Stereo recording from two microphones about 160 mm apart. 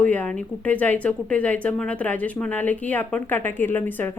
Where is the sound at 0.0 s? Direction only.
10° left (ahead or behind).